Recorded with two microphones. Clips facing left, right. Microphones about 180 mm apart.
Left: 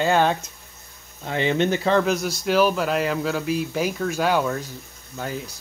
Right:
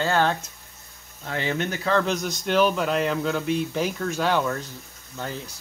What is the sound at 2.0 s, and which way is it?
Speech, 10° left (ahead or behind).